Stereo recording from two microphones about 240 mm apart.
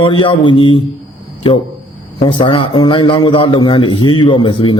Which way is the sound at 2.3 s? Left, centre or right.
Left.